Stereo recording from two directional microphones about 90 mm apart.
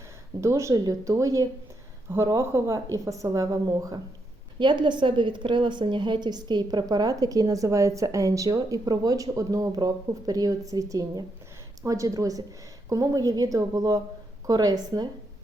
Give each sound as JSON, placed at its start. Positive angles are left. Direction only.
{"t": 0.4, "sound": "a woman's voice", "side_deg": -35}
{"t": 4.6, "sound": "a woman's voice", "side_deg": -60}